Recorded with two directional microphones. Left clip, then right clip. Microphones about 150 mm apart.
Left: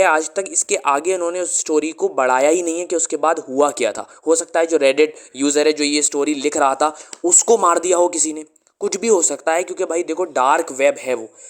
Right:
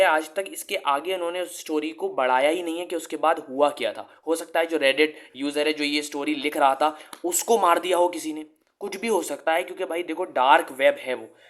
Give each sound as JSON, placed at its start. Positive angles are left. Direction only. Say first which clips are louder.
{"t": 0.0, "sound": "speech", "louder": "left 5 dB", "side_deg": 45}
{"t": 1.2, "sound": "speech", "louder": "left 7 dB", "side_deg": 40}